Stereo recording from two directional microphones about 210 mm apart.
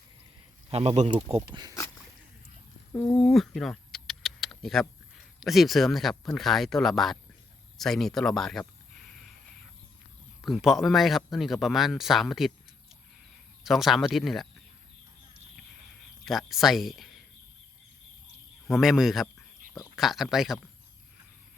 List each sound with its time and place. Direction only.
0.7 s speech: 30° right (ahead or behind)
2.9 s speech: 10° left (ahead or behind)
7.8 s a sound: centre (ahead or behind)
10.4 s speech: centre (ahead or behind)
13.7 s speech: centre (ahead or behind)
16.5 s speech: centre (ahead or behind)
18.7 s speech: centre (ahead or behind)